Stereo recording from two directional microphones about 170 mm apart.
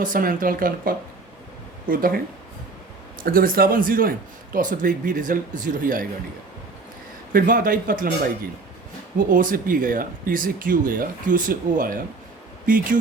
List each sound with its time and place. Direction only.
0.0 s speech: 55° right (ahead or behind)
3.2 s speech: 60° right (ahead or behind)
7.3 s speech: 55° right (ahead or behind)